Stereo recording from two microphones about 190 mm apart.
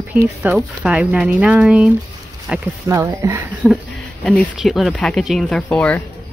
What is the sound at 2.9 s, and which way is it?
Speech, 15° right (ahead or behind).